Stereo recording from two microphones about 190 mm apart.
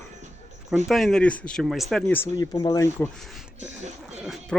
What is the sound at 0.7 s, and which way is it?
Speech, centre (ahead or behind).